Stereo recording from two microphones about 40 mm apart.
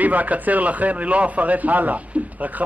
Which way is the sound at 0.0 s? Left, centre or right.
Right.